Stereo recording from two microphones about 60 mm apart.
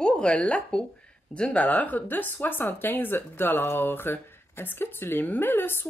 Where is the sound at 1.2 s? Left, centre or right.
Centre.